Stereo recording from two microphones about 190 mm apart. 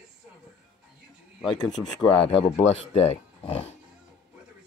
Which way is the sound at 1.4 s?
25° left (ahead or behind).